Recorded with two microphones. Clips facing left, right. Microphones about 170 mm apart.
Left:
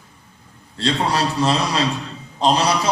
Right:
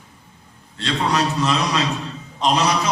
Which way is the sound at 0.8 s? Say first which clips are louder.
Left 1 dB; 30° left (ahead or behind).